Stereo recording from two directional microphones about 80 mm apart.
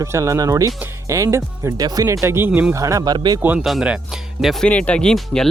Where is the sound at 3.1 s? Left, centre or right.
Right.